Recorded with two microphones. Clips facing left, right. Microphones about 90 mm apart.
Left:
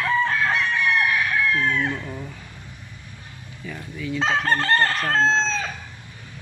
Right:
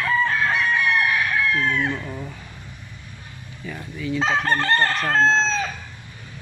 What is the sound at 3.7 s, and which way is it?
Chicken, 10° right (ahead or behind).